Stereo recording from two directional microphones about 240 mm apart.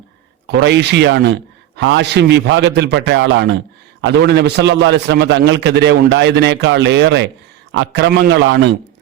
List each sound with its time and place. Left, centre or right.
0.4 s a man's voice: right